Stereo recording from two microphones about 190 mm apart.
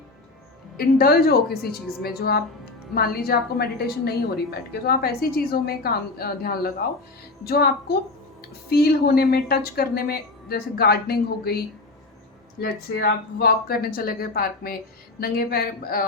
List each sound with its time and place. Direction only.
0.8 s a woman's voice: 55° left (ahead or behind)